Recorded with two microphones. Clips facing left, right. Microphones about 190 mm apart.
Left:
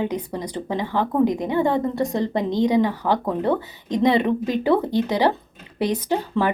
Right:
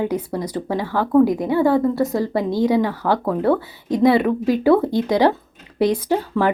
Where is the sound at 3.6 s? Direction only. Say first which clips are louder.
Right 3 dB; 10° right (ahead or behind).